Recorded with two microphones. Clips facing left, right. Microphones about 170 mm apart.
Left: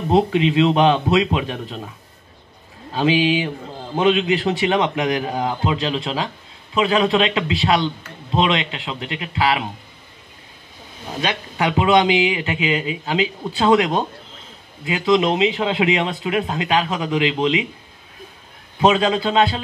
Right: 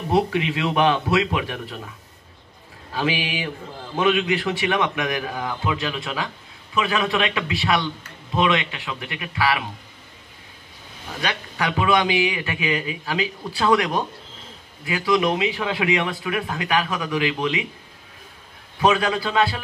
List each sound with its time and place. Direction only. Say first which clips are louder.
0.1 s a man's voice: left 4 dB; 20° left (ahead or behind)
2.9 s a man's voice: left 7 dB; 25° left (ahead or behind)
11.1 s a man's voice: left 4 dB; 20° left (ahead or behind)
18.8 s a man's voice: left 3 dB; 25° left (ahead or behind)